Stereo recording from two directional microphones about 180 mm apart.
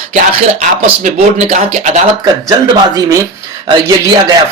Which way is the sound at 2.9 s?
20° right (ahead or behind).